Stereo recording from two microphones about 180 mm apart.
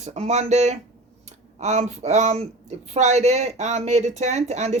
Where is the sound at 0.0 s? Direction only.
40° right (ahead or behind).